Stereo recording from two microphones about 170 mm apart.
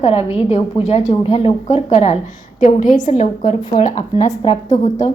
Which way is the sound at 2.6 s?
50° left (ahead or behind).